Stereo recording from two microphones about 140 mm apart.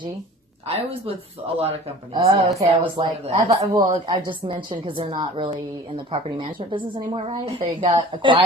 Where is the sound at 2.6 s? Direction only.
35° right (ahead or behind).